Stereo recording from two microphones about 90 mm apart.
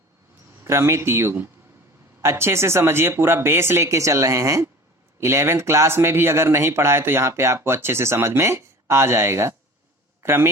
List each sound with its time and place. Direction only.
0.6 s speech: 30° right (ahead or behind)